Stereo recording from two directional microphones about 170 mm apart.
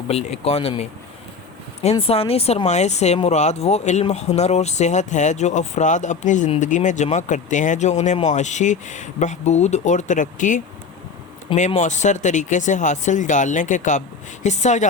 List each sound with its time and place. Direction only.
0.1 s speech: 40° left (ahead or behind)